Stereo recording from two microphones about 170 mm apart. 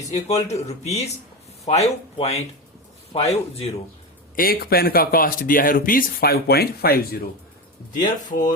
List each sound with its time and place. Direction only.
0.1 s speech: 40° left (ahead or behind)
4.4 s speech: 60° left (ahead or behind)
8.3 s speech: 50° left (ahead or behind)